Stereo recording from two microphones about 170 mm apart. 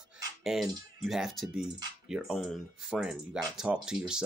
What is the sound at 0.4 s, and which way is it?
Speech, centre (ahead or behind).